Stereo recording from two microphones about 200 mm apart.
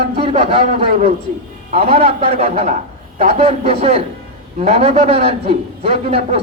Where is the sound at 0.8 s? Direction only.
35° right (ahead or behind).